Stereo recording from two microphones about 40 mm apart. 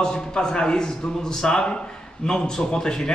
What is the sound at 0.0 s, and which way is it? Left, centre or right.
A man's voice, centre.